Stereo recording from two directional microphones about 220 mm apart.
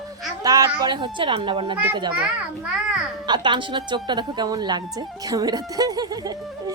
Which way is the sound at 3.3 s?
20° right (ahead or behind).